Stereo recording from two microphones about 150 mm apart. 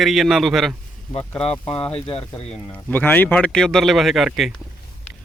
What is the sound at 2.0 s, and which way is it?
Speech, 40° left (ahead or behind).